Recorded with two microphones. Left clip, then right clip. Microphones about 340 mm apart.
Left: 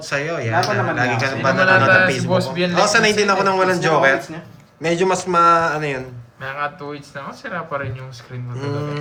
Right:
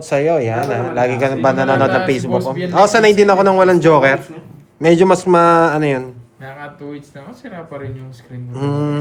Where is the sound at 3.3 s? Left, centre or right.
Right.